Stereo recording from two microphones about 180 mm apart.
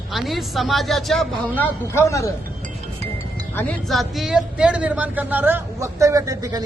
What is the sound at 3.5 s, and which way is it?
Speech, 5° left (ahead or behind).